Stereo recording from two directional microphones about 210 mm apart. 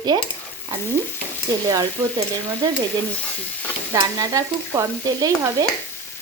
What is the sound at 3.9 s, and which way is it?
Speech, 15° right (ahead or behind).